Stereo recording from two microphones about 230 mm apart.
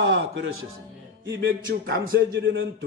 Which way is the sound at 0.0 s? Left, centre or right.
Right.